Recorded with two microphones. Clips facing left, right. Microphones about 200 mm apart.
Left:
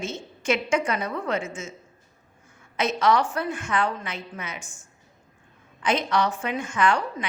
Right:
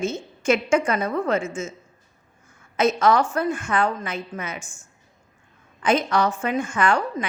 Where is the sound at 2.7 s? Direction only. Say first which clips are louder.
Right 3 dB; 45° right (ahead or behind).